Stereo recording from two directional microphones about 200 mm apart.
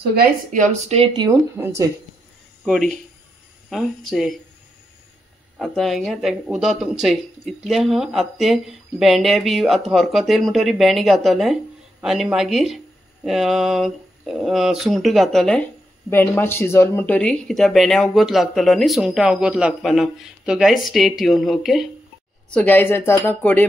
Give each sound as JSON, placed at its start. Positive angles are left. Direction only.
{"t": 0.0, "sound": "speech", "side_deg": -50}
{"t": 2.6, "sound": "speech", "side_deg": 0}
{"t": 5.6, "sound": "speech", "side_deg": 0}